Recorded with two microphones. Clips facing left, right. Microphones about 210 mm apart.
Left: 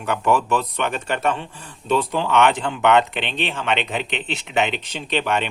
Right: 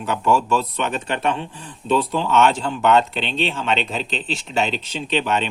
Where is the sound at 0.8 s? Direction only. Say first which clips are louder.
Even; 45° left (ahead or behind).